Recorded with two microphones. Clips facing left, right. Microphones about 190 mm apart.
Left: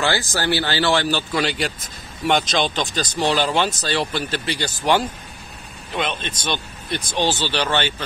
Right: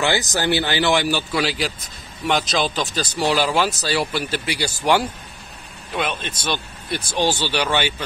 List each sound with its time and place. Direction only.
0.0 s speech: 20° right (ahead or behind)